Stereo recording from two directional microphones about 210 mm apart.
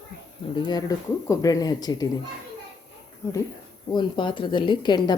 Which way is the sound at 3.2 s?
15° left (ahead or behind).